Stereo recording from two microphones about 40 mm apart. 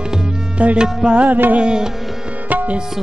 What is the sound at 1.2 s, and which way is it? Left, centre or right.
Music, right.